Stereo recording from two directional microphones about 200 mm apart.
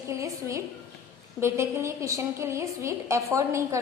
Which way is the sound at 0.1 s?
15° right (ahead or behind).